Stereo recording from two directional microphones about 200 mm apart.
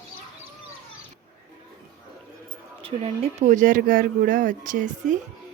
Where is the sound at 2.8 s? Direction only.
35° right (ahead or behind).